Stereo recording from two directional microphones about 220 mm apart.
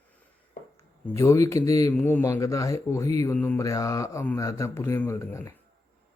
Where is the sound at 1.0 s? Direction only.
15° left (ahead or behind).